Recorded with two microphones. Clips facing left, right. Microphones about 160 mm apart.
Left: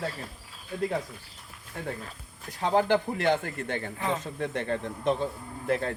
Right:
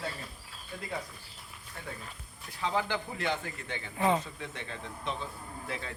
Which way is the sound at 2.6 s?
50° left (ahead or behind).